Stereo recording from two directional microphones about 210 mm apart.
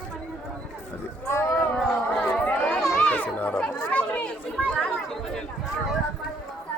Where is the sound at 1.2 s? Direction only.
10° left (ahead or behind).